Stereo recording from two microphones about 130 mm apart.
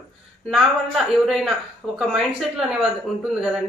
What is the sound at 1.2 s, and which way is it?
Speech, centre (ahead or behind).